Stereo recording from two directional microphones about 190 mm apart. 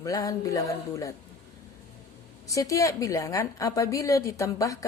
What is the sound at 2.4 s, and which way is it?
A woman's voice, 15° left (ahead or behind).